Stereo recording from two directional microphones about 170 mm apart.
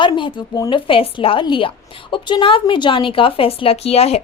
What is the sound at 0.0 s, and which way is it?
A woman's voice, 30° left (ahead or behind).